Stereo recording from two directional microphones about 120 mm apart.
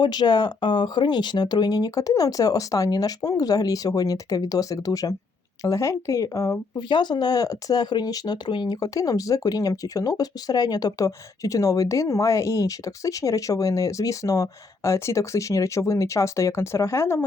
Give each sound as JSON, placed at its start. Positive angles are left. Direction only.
{"t": 0.0, "sound": "speech", "side_deg": 35}
{"t": 6.8, "sound": "speech", "side_deg": 40}